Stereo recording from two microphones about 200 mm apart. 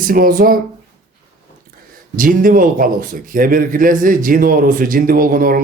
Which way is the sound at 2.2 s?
45° right (ahead or behind).